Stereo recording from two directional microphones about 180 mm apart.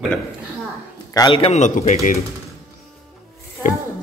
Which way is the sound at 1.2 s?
30° left (ahead or behind).